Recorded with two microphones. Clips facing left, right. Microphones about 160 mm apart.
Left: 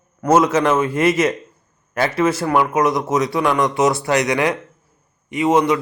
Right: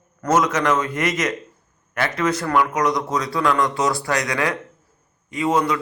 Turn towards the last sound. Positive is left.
turn(degrees=20)  # may be behind; listen again after turning